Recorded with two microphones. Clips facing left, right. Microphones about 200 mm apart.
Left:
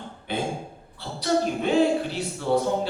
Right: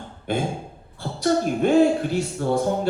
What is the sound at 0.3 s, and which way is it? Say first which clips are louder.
A woman's voice: right 3 dB; 45° right (ahead or behind).